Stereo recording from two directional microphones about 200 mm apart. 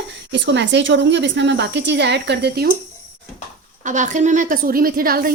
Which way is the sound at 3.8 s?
40° right (ahead or behind).